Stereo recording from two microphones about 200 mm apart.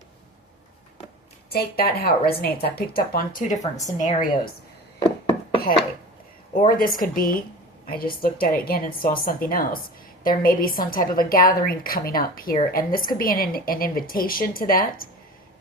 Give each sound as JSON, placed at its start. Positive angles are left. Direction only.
{"t": 1.5, "sound": "a woman's voice", "side_deg": 50}
{"t": 5.6, "sound": "chopping", "side_deg": 50}
{"t": 6.7, "sound": "a woman's voice", "side_deg": 45}